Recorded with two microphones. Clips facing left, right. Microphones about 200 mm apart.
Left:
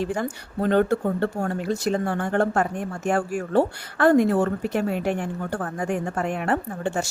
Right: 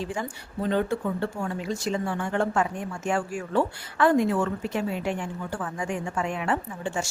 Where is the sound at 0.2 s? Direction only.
60° left (ahead or behind).